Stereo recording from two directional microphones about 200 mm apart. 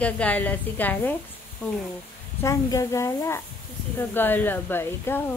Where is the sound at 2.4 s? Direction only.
15° left (ahead or behind).